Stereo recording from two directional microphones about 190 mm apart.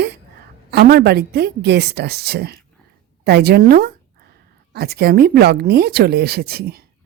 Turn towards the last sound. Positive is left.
turn(degrees=-55)  # may be behind; listen again after turning